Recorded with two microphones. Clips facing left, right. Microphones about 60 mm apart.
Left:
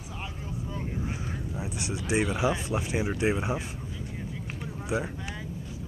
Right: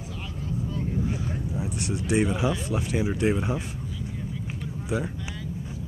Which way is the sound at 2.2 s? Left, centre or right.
Centre.